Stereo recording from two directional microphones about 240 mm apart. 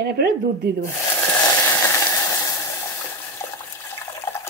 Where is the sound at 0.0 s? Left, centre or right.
Right.